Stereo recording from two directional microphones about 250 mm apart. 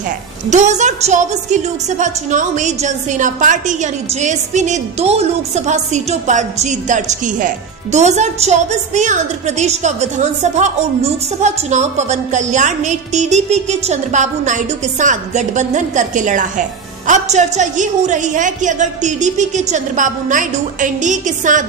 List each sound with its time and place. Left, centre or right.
0.5 s a woman's voice: right